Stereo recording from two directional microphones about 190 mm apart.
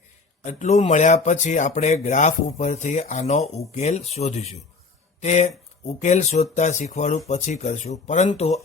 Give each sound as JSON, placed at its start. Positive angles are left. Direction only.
{"t": 0.4, "sound": "speech", "side_deg": 40}